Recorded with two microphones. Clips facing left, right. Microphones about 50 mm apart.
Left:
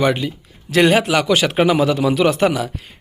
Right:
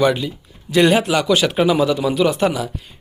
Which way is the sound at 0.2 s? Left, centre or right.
Left.